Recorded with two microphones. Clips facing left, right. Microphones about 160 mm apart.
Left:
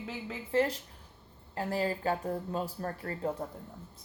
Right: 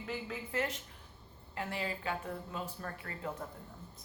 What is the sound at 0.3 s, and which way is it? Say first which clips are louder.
Speech: left 10 dB; 35° left (ahead or behind).